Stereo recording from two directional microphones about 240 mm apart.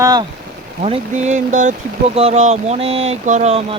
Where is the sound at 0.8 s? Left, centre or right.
Right.